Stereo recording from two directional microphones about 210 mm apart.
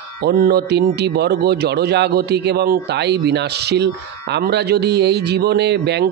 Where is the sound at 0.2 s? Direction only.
45° right (ahead or behind).